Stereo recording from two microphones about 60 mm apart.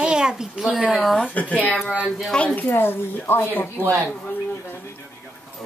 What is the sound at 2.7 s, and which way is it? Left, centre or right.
Speech, left.